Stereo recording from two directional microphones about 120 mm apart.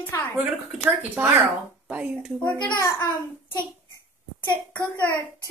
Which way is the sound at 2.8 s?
25° left (ahead or behind).